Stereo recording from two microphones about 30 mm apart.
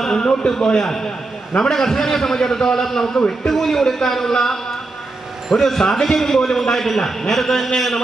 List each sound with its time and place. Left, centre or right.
0.2 s a man's voice: left; by 7.7 s centre